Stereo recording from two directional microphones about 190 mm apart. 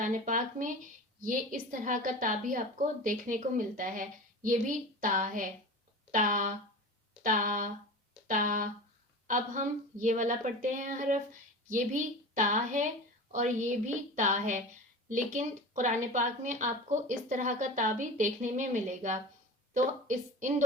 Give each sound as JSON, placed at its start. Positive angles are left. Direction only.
{"t": 0.0, "sound": "a woman's voice", "side_deg": -45}